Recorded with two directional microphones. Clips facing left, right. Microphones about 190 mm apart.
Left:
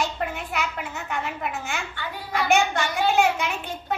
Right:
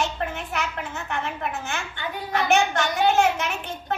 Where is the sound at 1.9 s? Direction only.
20° right (ahead or behind).